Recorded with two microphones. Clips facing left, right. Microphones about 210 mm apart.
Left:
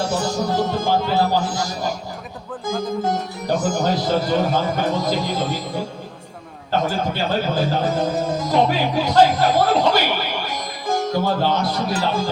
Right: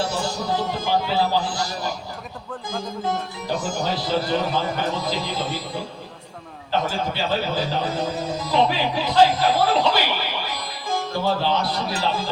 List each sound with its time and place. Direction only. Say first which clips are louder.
0.2 s speech: left 4 dB; 45° left (ahead or behind)